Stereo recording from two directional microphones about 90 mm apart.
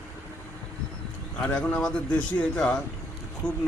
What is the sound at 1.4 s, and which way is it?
Speech, 15° left (ahead or behind).